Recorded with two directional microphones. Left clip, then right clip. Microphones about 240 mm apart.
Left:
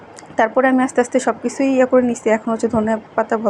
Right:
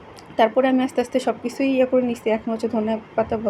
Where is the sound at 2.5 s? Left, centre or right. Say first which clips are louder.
Left 5 dB; centre.